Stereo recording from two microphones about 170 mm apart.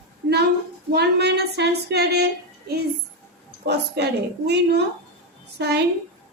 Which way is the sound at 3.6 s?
80° right.